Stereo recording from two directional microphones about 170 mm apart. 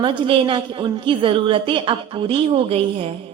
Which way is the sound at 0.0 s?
30° right (ahead or behind).